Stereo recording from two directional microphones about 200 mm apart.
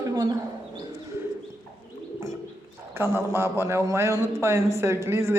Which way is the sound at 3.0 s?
10° right (ahead or behind).